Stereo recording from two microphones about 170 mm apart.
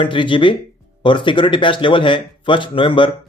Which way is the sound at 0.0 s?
30° left (ahead or behind).